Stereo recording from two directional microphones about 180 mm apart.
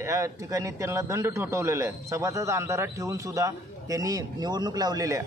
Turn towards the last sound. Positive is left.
turn(degrees=-20)  # may be behind; listen again after turning